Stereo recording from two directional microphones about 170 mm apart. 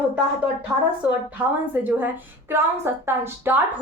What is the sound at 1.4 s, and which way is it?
A woman's voice, 10° right (ahead or behind).